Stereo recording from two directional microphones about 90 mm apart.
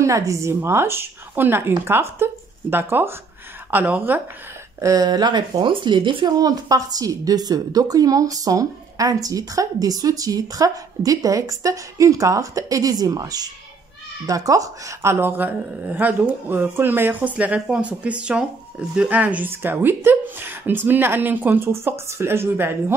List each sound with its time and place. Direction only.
0.0 s speech: 35° right (ahead or behind); by 4.2 s 20° right (ahead or behind)
4.7 s speech: 40° right (ahead or behind)
5.7 s speech: 65° right (ahead or behind)
6.2 s a woman's voice: 45° right (ahead or behind)
15.0 s speech: 25° right (ahead or behind)